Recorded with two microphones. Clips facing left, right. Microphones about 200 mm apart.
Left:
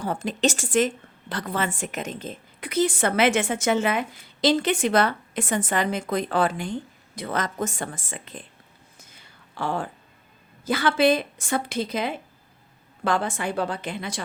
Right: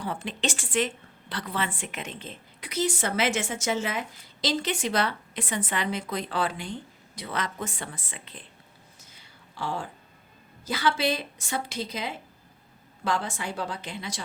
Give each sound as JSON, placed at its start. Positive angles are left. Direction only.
{"t": 0.0, "sound": "a woman's voice", "side_deg": 45}
{"t": 9.6, "sound": "a woman's voice", "side_deg": 55}